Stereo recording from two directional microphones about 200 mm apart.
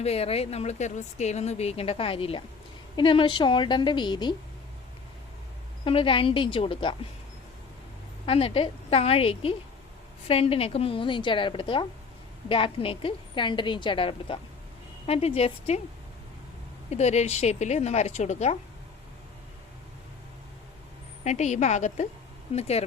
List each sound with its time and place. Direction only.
0.0 s a woman's voice: 30° left (ahead or behind)
5.8 s a woman's voice: 25° left (ahead or behind)
8.3 s a woman's voice: 30° left (ahead or behind)
16.9 s speech: 35° left (ahead or behind)
21.2 s speech: 35° left (ahead or behind)